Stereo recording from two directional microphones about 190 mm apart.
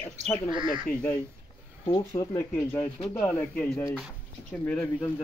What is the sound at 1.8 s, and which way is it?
A man's voice, 20° left (ahead or behind).